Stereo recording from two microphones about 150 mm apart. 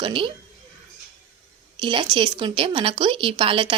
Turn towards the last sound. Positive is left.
turn(degrees=-35)  # may be behind; listen again after turning